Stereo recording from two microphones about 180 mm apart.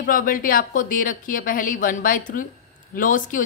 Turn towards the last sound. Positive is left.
turn(degrees=45)  # may be behind; listen again after turning